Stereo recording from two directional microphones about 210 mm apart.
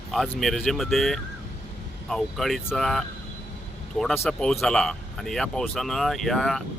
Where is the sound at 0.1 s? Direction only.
Centre (ahead or behind).